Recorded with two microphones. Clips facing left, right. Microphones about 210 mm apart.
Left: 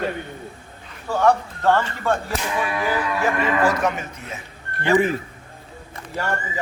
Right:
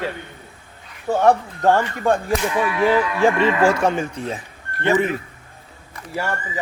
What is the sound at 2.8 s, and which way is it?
Speech, 30° right (ahead or behind).